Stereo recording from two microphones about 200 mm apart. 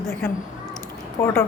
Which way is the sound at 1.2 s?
10° left (ahead or behind).